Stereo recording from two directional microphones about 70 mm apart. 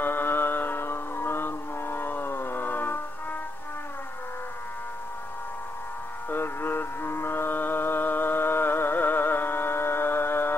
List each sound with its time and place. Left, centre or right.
0.0 s music: left
6.3 s music: left